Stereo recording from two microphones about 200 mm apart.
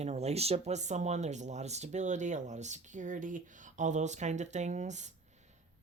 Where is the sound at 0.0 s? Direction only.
35° right (ahead or behind).